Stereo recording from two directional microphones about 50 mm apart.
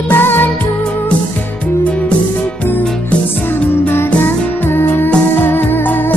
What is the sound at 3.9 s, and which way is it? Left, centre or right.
Music, left.